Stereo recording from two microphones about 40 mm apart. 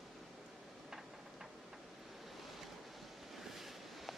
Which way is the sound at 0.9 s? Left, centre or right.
Centre.